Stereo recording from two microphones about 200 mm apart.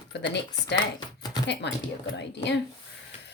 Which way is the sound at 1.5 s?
60° left (ahead or behind).